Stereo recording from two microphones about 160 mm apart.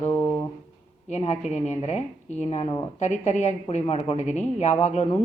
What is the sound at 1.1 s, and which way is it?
Speech, 45° left (ahead or behind).